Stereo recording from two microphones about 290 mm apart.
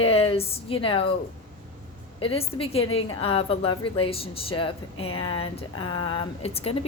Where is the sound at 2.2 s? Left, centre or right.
Centre.